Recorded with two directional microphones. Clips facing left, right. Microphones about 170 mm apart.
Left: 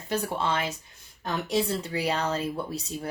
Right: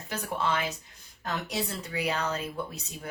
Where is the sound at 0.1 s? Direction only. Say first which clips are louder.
Left 3 dB; 30° left (ahead or behind).